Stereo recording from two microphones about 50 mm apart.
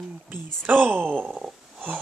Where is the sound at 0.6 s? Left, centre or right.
Right.